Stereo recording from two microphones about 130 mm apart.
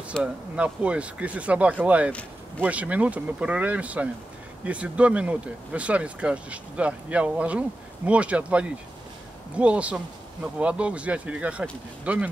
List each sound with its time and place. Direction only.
0.2 s speech: 10° right (ahead or behind)